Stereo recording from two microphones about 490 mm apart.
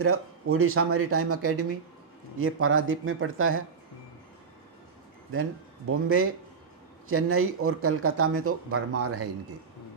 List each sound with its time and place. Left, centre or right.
0.0 s speech: right
5.9 s speech: right